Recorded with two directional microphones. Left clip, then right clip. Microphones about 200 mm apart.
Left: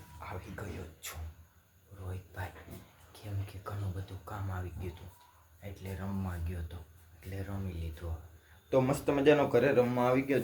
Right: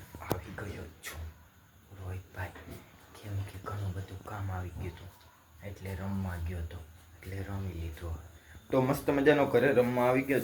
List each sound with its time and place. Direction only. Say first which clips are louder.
0.2 s whispering: right 6 dB; 5° left (ahead or behind)
4.3 s a sound: right 1 dB; 5° left (ahead or behind)
5.8 s speech: right 1 dB; centre (ahead or behind)
8.7 s speech: even; centre (ahead or behind)